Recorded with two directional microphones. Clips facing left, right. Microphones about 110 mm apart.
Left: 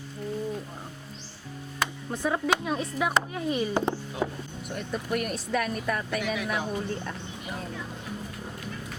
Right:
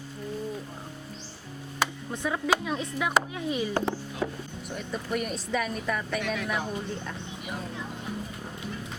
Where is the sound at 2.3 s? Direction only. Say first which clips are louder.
Left 1 dB; 5° left (ahead or behind).